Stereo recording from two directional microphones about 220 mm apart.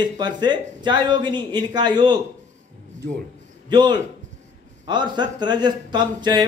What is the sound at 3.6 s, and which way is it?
Speech, 20° right (ahead or behind).